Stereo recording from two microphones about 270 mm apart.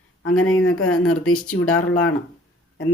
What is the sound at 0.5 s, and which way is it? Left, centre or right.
Speech, left.